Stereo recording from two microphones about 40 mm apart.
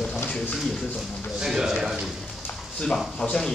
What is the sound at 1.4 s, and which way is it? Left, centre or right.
Speech, centre.